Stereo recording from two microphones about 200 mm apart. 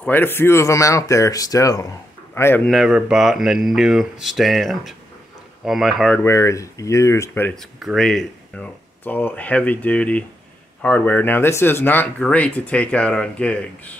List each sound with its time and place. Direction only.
0.0 s speech: 10° left (ahead or behind)